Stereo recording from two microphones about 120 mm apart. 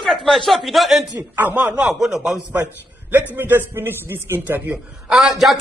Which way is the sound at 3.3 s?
15° right (ahead or behind).